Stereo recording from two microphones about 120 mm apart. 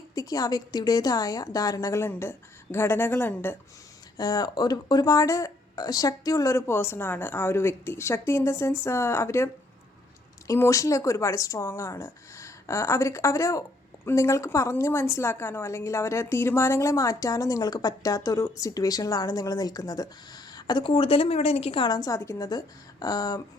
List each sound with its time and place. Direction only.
0.1 s speech: 30° left (ahead or behind)
4.2 s speech: 30° left (ahead or behind)